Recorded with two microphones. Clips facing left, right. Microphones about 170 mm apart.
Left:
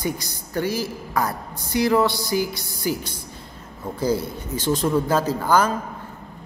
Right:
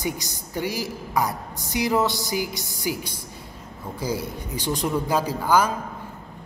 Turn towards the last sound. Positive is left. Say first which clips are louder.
# left 1 dB
turn(degrees=-10)  # may be behind; listen again after turning